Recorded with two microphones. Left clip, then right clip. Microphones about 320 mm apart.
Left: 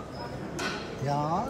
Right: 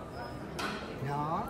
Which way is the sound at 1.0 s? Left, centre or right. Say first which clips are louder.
Left 6 dB; centre.